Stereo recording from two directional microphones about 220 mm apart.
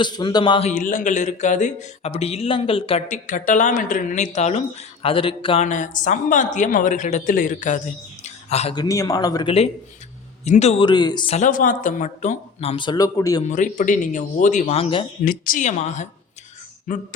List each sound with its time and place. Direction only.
0.0 s speech: 20° left (ahead or behind)
0.7 s speech: 35° left (ahead or behind); by 11.3 s 20° left (ahead or behind)
11.3 s speech: 35° left (ahead or behind); by 13.4 s 15° left (ahead or behind)
13.5 s speech: 35° left (ahead or behind)
15.2 s speech: 40° left (ahead or behind)